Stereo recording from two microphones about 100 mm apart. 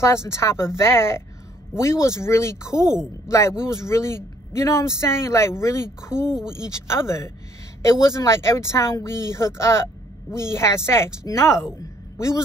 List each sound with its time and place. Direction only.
0.0 s speech: 25° left (ahead or behind)
6.2 s speech: 5° right (ahead or behind)
6.5 s speech: 25° left (ahead or behind)
11.8 s a sound: 30° left (ahead or behind)